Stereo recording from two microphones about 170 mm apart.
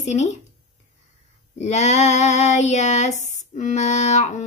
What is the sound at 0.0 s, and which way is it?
Female singing, 45° left (ahead or behind).